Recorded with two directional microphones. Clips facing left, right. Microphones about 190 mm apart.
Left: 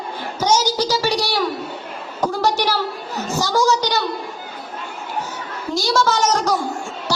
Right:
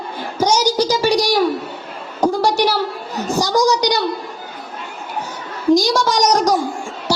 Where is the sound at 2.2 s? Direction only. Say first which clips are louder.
Right 4 dB; 10° right (ahead or behind).